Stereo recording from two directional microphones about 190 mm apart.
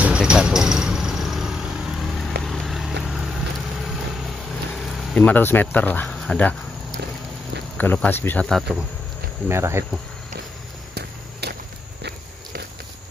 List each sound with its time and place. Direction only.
0.0 s vehicle: 5° right (ahead or behind)
7.7 s speech: 10° left (ahead or behind)
9.5 s speech: 15° right (ahead or behind)
11.4 s a sound: 60° right (ahead or behind)